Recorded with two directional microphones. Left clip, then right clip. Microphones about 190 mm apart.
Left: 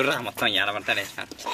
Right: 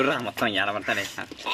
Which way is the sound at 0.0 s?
30° right (ahead or behind).